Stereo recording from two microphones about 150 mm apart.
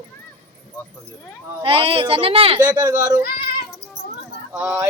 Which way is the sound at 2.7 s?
25° right (ahead or behind).